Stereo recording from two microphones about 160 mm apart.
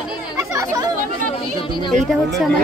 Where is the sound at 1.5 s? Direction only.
30° left (ahead or behind).